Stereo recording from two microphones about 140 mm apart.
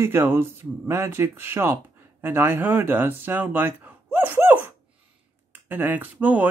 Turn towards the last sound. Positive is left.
turn(degrees=-10)  # may be behind; listen again after turning